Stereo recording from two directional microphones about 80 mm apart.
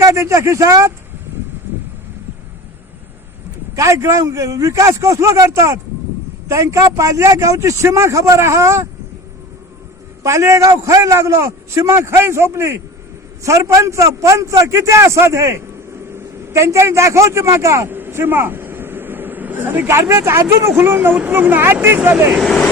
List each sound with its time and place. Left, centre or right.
0.0 s a man's voice: right
3.8 s a man's voice: right
10.2 s a man's voice: right
16.1 s a sound: right
19.9 s a man's voice: right
22.4 s speech: centre